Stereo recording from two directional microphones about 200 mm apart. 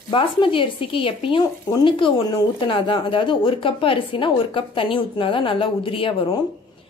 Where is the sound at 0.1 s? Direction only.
25° left (ahead or behind).